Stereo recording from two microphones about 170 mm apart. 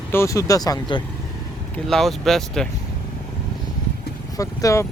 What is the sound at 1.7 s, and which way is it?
Speech, centre (ahead or behind).